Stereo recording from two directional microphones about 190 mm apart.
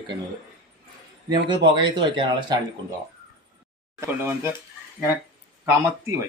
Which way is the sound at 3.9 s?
10° right (ahead or behind).